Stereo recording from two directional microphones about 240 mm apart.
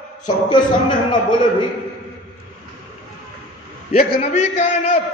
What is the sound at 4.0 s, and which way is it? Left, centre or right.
A man's voice, left.